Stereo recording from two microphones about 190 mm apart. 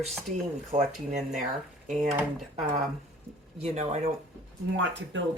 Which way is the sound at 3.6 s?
35° right (ahead or behind).